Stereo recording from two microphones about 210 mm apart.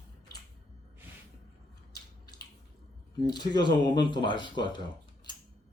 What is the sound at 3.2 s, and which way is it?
Speech, 20° left (ahead or behind).